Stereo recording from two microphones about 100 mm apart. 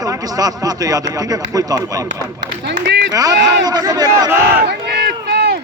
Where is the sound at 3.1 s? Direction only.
40° right (ahead or behind).